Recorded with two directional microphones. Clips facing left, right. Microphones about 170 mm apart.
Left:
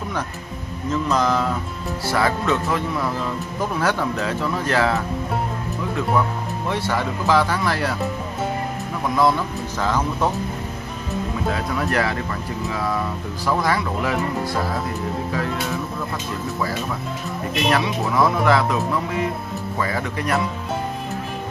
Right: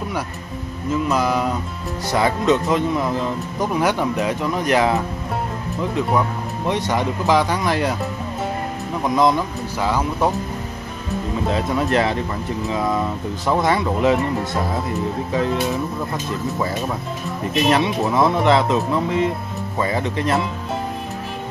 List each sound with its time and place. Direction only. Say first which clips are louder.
1.0 s speech: even; 10° right (ahead or behind)
6.7 s speech: right 3 dB; 20° right (ahead or behind)
9.1 s speech: right 2 dB; 15° right (ahead or behind)
11.4 s speech: right 4 dB; 20° right (ahead or behind)
17.6 s speech: right 3 dB; 25° right (ahead or behind)